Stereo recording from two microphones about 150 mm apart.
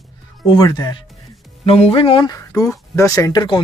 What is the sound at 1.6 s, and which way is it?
Speech, 40° left (ahead or behind).